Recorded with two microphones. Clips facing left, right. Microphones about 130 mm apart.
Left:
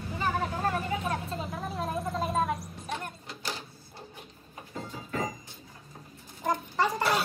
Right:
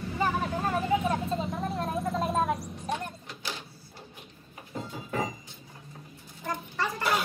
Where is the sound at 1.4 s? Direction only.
Centre (ahead or behind).